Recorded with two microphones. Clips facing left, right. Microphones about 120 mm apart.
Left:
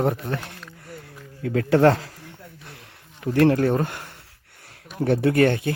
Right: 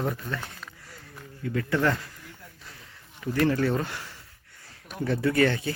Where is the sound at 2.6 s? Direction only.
65° left (ahead or behind).